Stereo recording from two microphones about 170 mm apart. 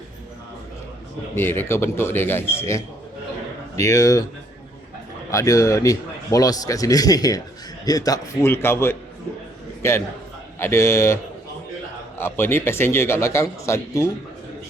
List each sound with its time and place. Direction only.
1.4 s a man's voice: 15° left (ahead or behind)
5.3 s a man's voice: 20° left (ahead or behind)